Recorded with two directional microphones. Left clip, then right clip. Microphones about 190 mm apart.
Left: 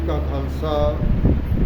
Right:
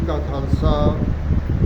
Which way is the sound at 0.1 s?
5° left (ahead or behind).